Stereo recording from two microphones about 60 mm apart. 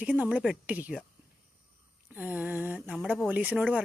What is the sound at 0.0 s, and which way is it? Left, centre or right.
Speech, right.